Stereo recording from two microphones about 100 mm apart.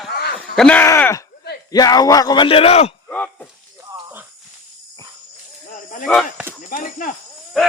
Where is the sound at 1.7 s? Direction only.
40° left (ahead or behind).